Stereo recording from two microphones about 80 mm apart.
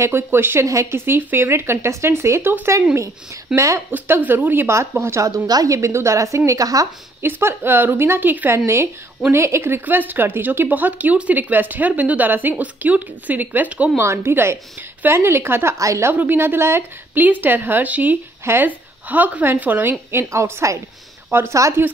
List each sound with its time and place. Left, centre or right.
0.0 s speech: right
0.7 s speech: right
1.0 s speech: right
3.5 s speech: right
3.9 s speech: right
4.6 s speech: right
5.3 s a woman's voice: right
7.2 s speech: right
13.9 s speech: right
16.1 s speech: right
18.4 s speech: right
18.7 s speech: right